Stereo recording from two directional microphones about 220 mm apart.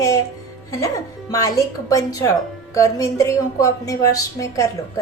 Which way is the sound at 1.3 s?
15° left (ahead or behind).